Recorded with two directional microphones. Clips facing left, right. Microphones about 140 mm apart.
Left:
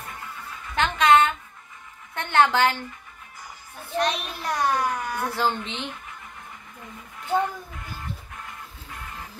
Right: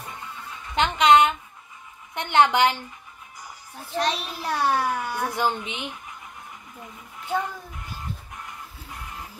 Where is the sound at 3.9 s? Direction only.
35° right (ahead or behind).